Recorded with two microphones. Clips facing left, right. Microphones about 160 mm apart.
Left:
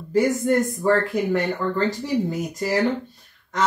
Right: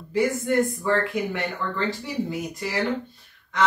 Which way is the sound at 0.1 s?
40° left (ahead or behind).